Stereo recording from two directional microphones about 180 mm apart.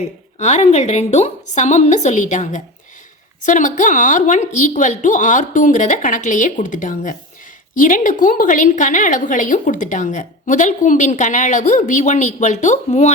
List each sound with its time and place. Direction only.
0.3 s a woman's voice: 40° left (ahead or behind)